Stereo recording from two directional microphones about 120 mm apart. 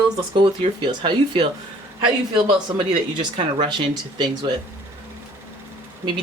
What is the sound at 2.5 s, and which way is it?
Speech, 45° right (ahead or behind).